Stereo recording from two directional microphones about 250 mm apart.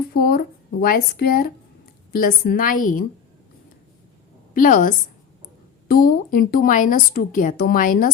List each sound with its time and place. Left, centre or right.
0.1 s a woman's voice: left
4.5 s a woman's voice: left